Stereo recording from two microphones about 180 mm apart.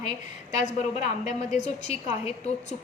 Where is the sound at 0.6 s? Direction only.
40° left (ahead or behind).